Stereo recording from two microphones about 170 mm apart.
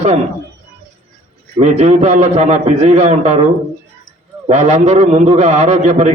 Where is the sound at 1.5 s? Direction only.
40° right (ahead or behind).